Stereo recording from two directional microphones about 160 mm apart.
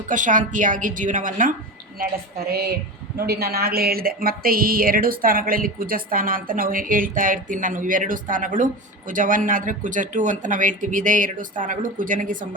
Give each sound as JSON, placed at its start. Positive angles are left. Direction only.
{"t": 0.1, "sound": "speech", "side_deg": -55}
{"t": 2.0, "sound": "a sound", "side_deg": -75}
{"t": 3.2, "sound": "speech", "side_deg": -75}